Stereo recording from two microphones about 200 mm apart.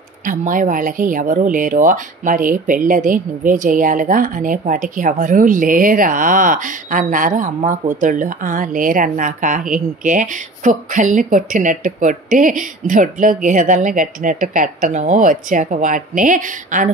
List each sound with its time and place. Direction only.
0.2 s speech: 40° right (ahead or behind)